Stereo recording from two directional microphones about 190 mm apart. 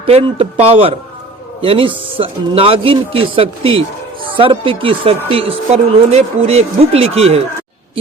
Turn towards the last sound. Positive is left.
turn(degrees=-30)  # may be behind; listen again after turning